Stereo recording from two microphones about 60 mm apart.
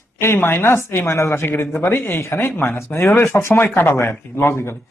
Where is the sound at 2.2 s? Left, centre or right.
Left.